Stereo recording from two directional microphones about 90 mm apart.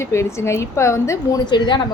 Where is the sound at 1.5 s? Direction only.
55° left (ahead or behind).